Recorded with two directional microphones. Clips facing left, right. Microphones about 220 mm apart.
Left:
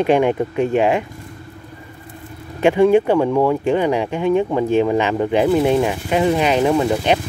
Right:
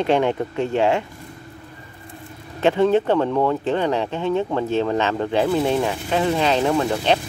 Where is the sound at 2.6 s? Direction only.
10° left (ahead or behind).